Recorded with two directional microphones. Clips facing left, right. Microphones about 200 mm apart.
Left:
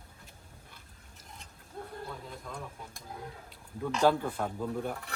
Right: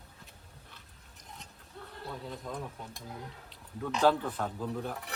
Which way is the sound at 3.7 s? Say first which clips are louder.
Even; centre (ahead or behind).